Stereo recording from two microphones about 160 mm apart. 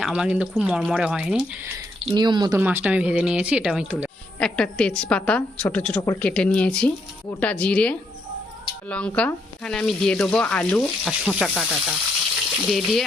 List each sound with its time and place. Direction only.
0.0 s speech: 5° right (ahead or behind)
2.1 s speech: 25° right (ahead or behind)
2.6 s speech: 10° right (ahead or behind)
4.4 s a woman's voice: 5° left (ahead or behind)